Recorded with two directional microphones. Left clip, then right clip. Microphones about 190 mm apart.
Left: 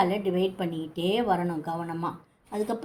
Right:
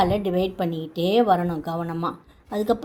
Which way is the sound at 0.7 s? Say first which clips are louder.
Right 6 dB; 40° right (ahead or behind).